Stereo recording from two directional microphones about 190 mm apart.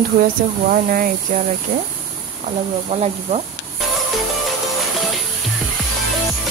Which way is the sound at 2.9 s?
35° right (ahead or behind).